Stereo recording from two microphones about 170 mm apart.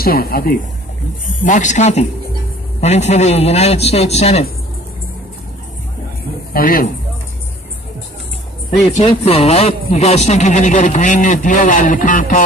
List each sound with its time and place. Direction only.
0.0 s speech: 60° left (ahead or behind)
1.4 s a man's voice: 45° left (ahead or behind)
6.5 s speech: 60° left (ahead or behind)
9.0 s speech: 35° left (ahead or behind)